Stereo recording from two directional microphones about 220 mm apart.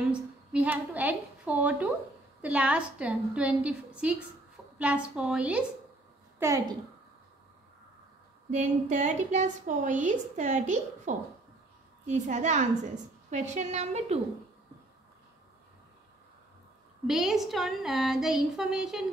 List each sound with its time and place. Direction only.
0.1 s a woman's voice: 5° right (ahead or behind)
8.5 s a woman's voice: 35° right (ahead or behind)
17.0 s speech: centre (ahead or behind)